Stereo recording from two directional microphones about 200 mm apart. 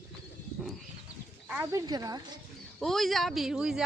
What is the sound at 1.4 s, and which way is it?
Speech, 10° right (ahead or behind).